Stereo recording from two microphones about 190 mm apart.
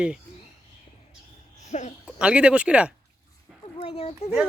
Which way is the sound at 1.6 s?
40° left (ahead or behind).